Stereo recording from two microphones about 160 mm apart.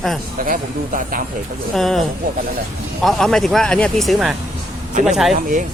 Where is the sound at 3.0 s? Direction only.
Centre (ahead or behind).